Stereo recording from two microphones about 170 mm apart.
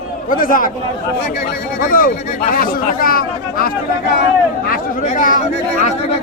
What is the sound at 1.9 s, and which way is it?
Speech, 55° left (ahead or behind).